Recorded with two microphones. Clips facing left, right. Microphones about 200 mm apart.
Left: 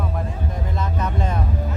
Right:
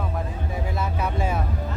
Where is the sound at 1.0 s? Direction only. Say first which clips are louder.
Left 1 dB; 10° right (ahead or behind).